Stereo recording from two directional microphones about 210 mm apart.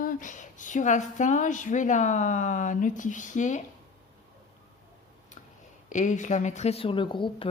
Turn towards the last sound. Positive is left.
turn(degrees=25)  # may be behind; listen again after turning